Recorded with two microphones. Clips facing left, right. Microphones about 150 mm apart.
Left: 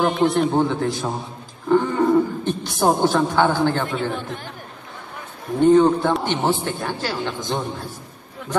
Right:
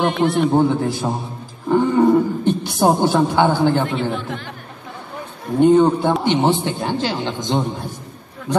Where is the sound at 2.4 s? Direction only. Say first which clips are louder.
Right 3 dB; 15° right (ahead or behind).